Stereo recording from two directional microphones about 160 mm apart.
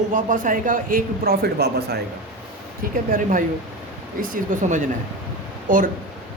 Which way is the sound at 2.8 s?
60° right (ahead or behind).